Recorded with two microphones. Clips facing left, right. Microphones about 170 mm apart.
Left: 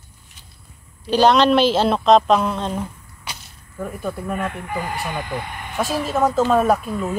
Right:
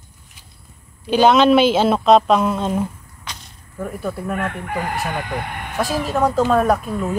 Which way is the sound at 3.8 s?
5° right (ahead or behind).